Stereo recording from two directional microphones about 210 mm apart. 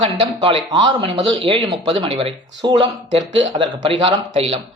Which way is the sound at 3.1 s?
35° right (ahead or behind).